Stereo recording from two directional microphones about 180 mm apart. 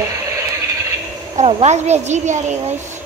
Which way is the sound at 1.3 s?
40° right (ahead or behind).